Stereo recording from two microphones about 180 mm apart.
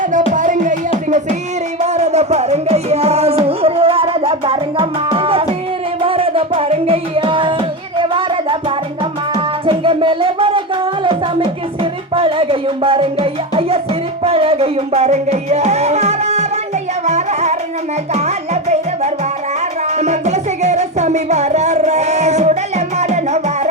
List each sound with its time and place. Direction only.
0.3 s music: 45° right (ahead or behind)
1.8 s music: 40° right (ahead or behind)